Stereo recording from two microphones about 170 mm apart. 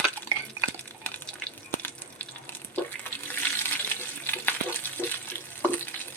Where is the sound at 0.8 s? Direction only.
10° left (ahead or behind).